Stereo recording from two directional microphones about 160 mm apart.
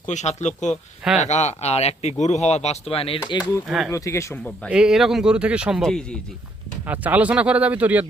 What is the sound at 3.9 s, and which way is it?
Speech, 20° left (ahead or behind).